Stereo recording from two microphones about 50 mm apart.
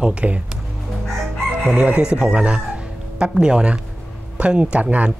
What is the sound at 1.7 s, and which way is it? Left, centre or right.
Speech, right.